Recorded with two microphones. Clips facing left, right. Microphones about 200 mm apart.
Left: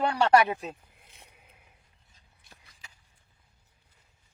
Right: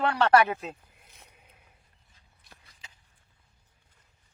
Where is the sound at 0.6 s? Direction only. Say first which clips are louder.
Even; centre (ahead or behind).